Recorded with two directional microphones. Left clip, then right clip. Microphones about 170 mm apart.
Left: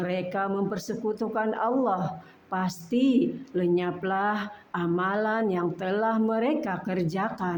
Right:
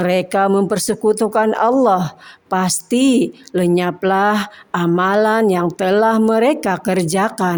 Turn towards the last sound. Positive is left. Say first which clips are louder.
# right 12 dB
turn(degrees=-50)  # may be behind; listen again after turning